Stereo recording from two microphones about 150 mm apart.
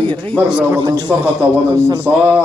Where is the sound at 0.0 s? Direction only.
35° right (ahead or behind).